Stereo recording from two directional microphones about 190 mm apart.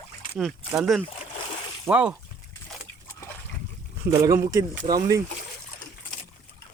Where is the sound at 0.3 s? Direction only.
Centre (ahead or behind).